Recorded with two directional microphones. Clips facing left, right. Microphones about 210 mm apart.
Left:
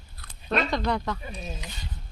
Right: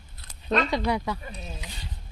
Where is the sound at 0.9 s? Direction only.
10° right (ahead or behind).